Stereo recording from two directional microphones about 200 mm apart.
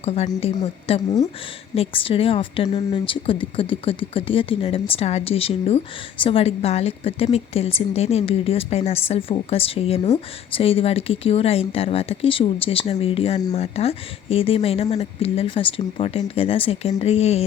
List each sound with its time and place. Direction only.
0.0 s speech: 30° left (ahead or behind)